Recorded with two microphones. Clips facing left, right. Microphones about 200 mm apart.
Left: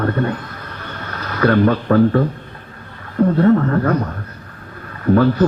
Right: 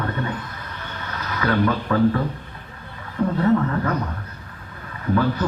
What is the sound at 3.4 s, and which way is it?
Speech, 45° left (ahead or behind).